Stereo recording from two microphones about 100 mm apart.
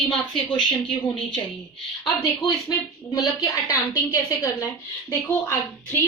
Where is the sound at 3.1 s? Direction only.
40° left (ahead or behind).